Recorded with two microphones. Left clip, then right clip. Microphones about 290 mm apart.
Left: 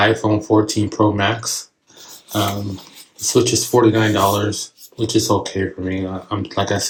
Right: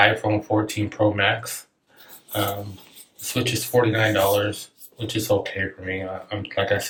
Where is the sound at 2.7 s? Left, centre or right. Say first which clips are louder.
Left 10 dB; centre.